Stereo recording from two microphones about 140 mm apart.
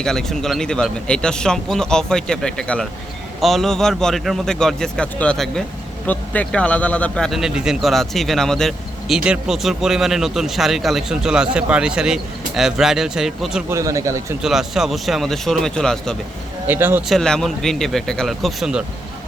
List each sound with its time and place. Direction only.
0.0 s a man's voice: 5° left (ahead or behind)
13.7 s speech: 20° right (ahead or behind)
14.4 s a man's voice: centre (ahead or behind)
16.6 s speech: 15° right (ahead or behind)
17.1 s a man's voice: 5° left (ahead or behind)